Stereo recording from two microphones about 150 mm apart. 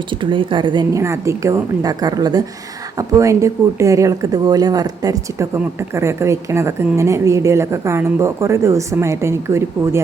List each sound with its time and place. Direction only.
0.2 s a woman's voice: 35° right (ahead or behind); by 10.0 s 20° right (ahead or behind)